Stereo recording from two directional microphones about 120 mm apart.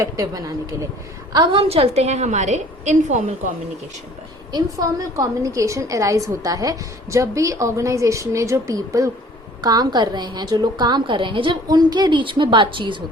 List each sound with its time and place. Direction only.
0.0 s a woman's voice: 30° right (ahead or behind)
1.3 s a woman's voice: 40° right (ahead or behind); by 3.2 s 90° right
4.5 s a woman's voice: 30° right (ahead or behind)